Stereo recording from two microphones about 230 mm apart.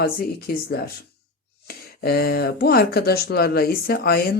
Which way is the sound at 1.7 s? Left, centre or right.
Left.